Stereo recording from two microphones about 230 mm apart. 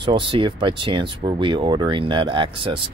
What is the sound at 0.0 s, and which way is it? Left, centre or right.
Speech, right.